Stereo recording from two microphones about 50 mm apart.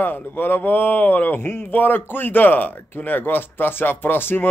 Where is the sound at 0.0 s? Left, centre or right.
Left.